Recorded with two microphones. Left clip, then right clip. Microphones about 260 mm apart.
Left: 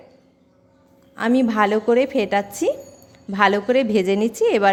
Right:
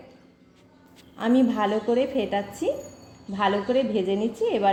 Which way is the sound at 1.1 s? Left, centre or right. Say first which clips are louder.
Left 4 dB; left.